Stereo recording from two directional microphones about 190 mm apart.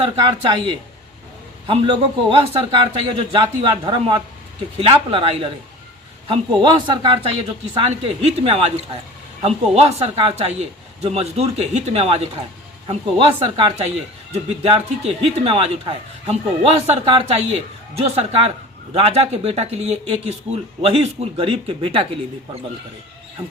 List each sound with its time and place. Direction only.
0.0 s speech: 25° right (ahead or behind)
6.6 s speech: 25° right (ahead or behind)